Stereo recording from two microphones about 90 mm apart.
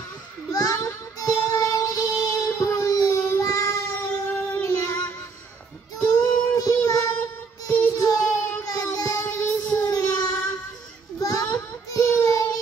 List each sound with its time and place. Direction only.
0.5 s a sound: 45° left (ahead or behind)
1.2 s child singing: 40° left (ahead or behind)
4.6 s child singing: 40° left (ahead or behind)
5.9 s child singing: 30° left (ahead or behind)
9.4 s child singing: 20° left (ahead or behind)
9.8 s child singing: 40° left (ahead or behind)
11.1 s a sound: 40° left (ahead or behind)
11.9 s child singing: 35° left (ahead or behind)